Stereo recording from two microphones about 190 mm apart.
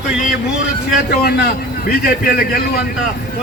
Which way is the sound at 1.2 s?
55° left (ahead or behind).